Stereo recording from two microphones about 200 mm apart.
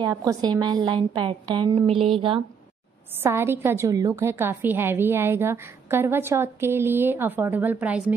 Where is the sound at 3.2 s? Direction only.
10° right (ahead or behind).